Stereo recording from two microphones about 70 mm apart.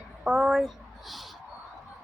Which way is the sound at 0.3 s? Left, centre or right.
Centre.